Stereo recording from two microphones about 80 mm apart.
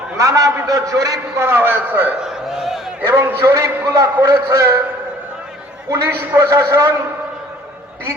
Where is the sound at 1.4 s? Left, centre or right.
Right.